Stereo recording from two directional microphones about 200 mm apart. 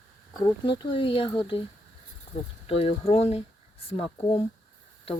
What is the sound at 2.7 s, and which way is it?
Speech, 30° left (ahead or behind).